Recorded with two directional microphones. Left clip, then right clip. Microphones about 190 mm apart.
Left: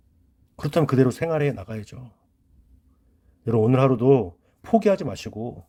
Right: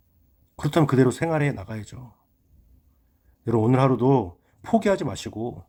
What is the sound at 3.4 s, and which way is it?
Speech, 20° left (ahead or behind).